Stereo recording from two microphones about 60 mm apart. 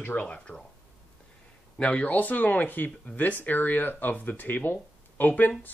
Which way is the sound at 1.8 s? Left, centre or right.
Left.